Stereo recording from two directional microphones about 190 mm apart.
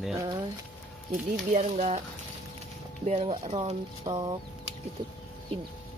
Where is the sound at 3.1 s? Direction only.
35° right (ahead or behind).